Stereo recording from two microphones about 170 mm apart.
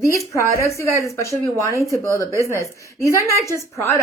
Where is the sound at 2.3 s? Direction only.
15° right (ahead or behind).